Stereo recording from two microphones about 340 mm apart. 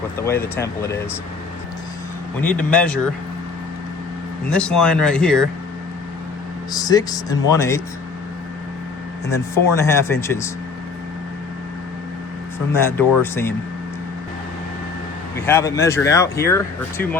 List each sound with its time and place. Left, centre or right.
0.2 s speech: centre
2.4 s speech: centre
4.4 s speech: centre
6.7 s speech: centre
9.3 s speech: centre
12.7 s speech: centre
15.4 s speech: centre